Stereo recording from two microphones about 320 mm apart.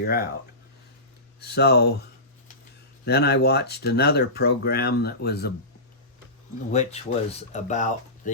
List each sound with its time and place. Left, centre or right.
0.0 s speech: left
1.4 s speech: left
3.1 s speech: left
6.7 s speech: centre